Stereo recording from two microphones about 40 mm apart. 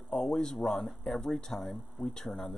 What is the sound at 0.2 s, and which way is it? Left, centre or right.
Speech, centre.